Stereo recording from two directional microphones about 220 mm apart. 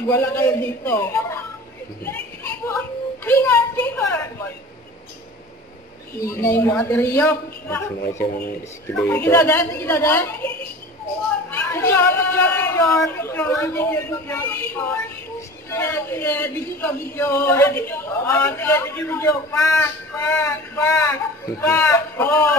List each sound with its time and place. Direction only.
0.0 s speech: 10° left (ahead or behind)
2.0 s a sound: 10° left (ahead or behind)
3.3 s a woman's voice: 10° left (ahead or behind)
6.1 s speech: 10° left (ahead or behind)
8.2 s speech: 45° left (ahead or behind)
8.9 s speech: 10° left (ahead or behind)
11.5 s speech: 10° left (ahead or behind)